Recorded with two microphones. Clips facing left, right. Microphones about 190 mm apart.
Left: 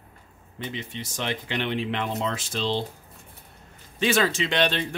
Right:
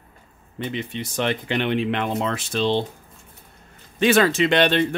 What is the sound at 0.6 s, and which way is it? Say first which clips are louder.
Speech: right 6 dB; 60° right (ahead or behind).